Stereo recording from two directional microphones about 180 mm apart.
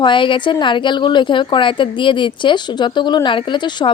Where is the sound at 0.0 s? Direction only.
25° left (ahead or behind).